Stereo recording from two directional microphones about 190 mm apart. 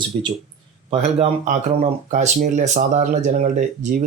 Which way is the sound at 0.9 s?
35° right (ahead or behind).